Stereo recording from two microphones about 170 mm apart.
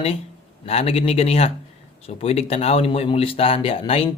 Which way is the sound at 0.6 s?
35° left (ahead or behind).